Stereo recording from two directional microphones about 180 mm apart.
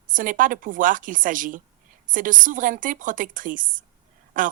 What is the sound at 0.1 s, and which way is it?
Speech, 50° right (ahead or behind).